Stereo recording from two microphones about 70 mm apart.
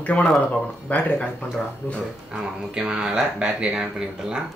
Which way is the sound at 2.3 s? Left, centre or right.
Centre.